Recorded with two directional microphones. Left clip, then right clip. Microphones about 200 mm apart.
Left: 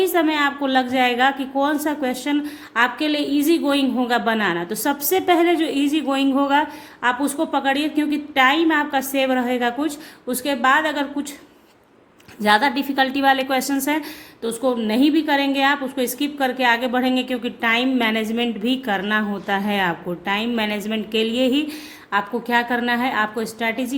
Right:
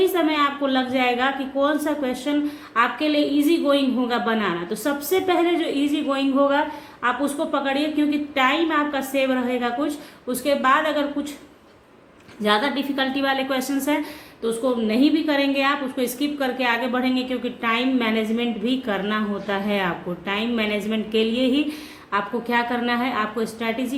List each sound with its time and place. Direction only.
0.0 s a woman's voice: 45° left (ahead or behind)
12.4 s a woman's voice: 45° left (ahead or behind)